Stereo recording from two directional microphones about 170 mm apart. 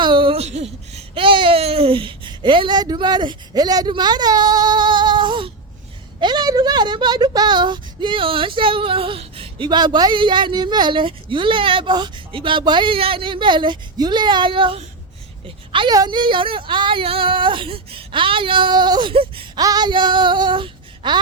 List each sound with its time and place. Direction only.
0.0 s a woman's voice: 30° right (ahead or behind)